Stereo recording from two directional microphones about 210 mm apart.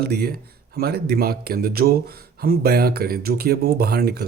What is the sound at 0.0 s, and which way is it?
Speech, 45° right (ahead or behind).